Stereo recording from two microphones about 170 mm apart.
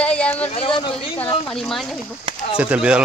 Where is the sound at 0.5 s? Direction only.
30° left (ahead or behind).